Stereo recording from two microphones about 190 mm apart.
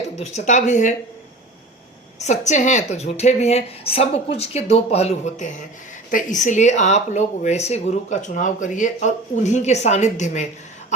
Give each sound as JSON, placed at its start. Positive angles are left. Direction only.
{"t": 0.2, "sound": "speech", "side_deg": 35}
{"t": 2.1, "sound": "speech", "side_deg": 35}